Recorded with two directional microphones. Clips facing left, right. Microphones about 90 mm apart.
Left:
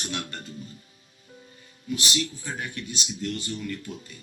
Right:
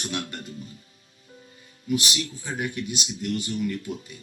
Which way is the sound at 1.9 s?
10° right (ahead or behind).